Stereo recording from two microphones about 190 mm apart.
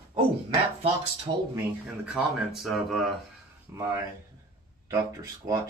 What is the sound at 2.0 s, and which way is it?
Speech, 5° right (ahead or behind).